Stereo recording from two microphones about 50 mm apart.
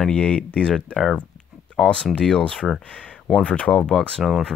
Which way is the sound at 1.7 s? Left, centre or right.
Centre.